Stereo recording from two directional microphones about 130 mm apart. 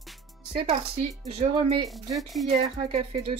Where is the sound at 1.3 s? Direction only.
50° right (ahead or behind).